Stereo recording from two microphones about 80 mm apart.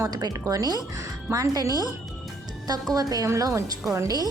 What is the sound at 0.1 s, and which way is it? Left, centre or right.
Speech, right.